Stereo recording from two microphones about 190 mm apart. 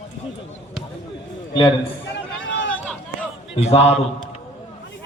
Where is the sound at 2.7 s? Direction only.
5° left (ahead or behind).